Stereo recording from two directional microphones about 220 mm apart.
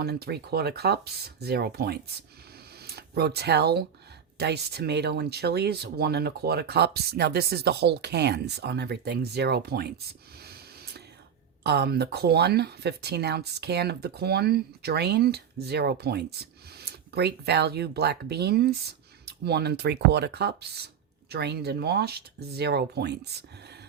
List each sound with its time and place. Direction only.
0.0 s speech: 45° right (ahead or behind)
10.4 s a sound: 45° right (ahead or behind)
11.6 s speech: 50° right (ahead or behind)